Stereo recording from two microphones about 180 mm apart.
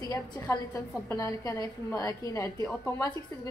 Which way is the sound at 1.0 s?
20° left (ahead or behind).